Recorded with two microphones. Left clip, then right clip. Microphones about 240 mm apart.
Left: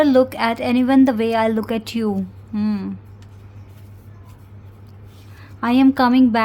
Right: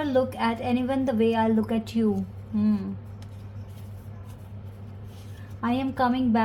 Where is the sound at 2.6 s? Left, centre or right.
Left.